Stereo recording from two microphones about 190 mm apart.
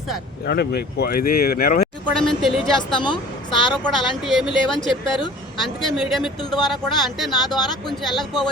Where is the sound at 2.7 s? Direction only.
25° left (ahead or behind).